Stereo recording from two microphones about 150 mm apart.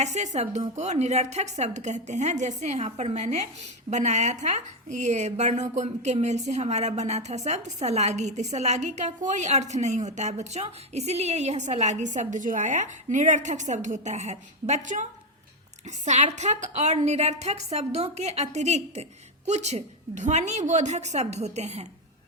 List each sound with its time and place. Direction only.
0.0 s a woman's voice: 50° right (ahead or behind)